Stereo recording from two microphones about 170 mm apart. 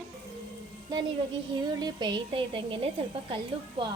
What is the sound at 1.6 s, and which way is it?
Speech, 25° right (ahead or behind).